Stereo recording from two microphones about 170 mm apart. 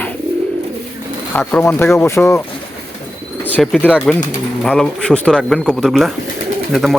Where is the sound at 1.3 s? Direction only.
10° left (ahead or behind).